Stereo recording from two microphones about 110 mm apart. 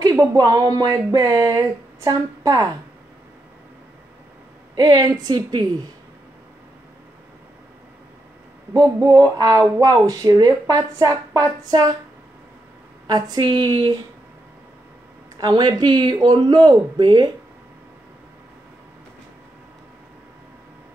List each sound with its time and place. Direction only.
0.1 s speech: 30° right (ahead or behind)
4.7 s speech: 40° right (ahead or behind)
8.8 s speech: 30° right (ahead or behind)
13.0 s speech: 40° right (ahead or behind)
15.3 s speech: 40° right (ahead or behind)